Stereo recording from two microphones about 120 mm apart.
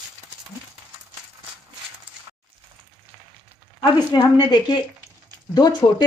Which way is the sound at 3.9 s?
40° left (ahead or behind).